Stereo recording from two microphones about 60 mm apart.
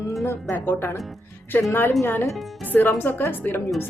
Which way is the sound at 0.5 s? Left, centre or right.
Left.